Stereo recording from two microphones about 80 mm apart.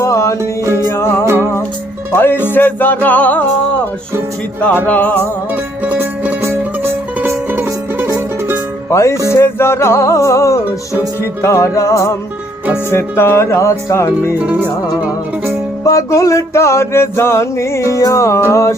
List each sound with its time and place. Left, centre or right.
0.0 s music: left
4.9 s music: left
5.8 s music: centre
8.9 s music: left
12.9 s music: left
14.4 s music: centre
15.8 s music: left